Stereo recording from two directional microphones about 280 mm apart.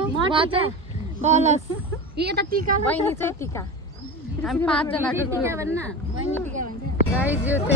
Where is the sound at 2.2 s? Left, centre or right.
Right.